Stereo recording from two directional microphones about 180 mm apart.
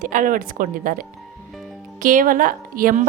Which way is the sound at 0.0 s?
50° right (ahead or behind).